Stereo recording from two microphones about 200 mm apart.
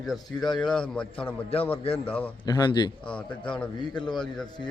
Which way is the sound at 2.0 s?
10° left (ahead or behind).